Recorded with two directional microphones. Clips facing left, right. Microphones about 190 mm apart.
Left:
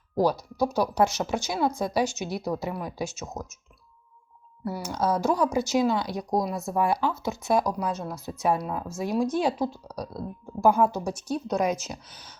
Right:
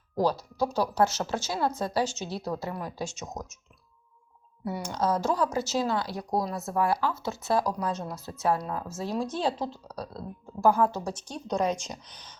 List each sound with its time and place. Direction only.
0.2 s speech: 10° left (ahead or behind)
4.6 s speech: 5° left (ahead or behind)